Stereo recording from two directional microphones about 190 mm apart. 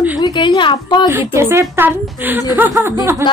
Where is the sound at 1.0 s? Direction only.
15° right (ahead or behind).